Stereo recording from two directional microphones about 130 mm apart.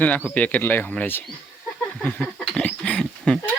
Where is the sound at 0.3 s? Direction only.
10° left (ahead or behind).